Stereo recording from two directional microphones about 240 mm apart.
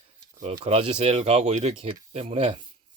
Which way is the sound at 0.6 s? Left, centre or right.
Right.